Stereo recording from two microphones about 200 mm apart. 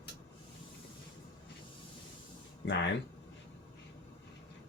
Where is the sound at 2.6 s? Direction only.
65° left (ahead or behind).